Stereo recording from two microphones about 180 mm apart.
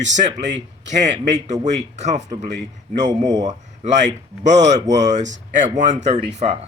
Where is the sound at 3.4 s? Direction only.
40° right (ahead or behind).